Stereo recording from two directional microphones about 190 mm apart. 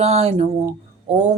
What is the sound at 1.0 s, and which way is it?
Music, 35° right (ahead or behind).